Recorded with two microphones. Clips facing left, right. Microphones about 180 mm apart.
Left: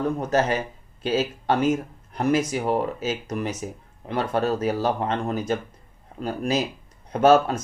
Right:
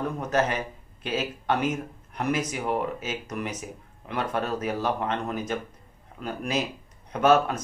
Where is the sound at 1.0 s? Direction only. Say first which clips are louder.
Left 5 dB; 30° left (ahead or behind).